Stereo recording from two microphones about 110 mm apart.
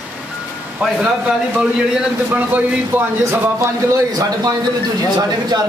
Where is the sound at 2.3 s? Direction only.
15° right (ahead or behind).